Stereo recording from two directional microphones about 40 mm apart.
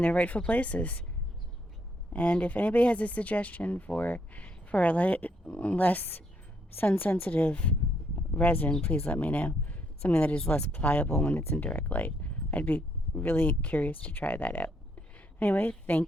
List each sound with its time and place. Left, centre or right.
0.0 s speech: left
2.1 s a woman's voice: left
7.3 s speech: left
8.8 s speech: left
13.2 s a woman's voice: left
13.6 s speech: left